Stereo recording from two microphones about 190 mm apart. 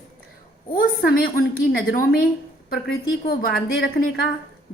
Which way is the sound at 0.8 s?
50° left (ahead or behind).